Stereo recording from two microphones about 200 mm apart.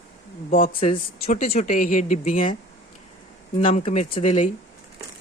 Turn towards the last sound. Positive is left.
turn(degrees=35)  # may be behind; listen again after turning